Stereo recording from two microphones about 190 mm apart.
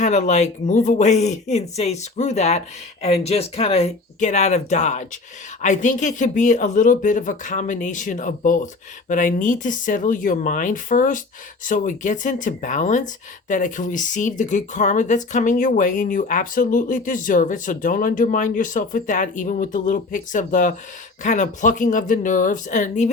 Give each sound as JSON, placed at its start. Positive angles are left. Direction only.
{"t": 0.0, "sound": "speech", "side_deg": 40}